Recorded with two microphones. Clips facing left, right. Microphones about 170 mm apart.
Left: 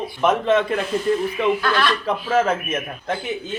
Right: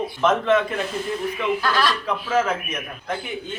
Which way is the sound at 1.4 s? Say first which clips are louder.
Left 3 dB; 40° left (ahead or behind).